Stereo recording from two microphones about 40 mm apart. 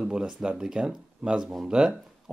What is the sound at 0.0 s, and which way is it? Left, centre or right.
Speech, right.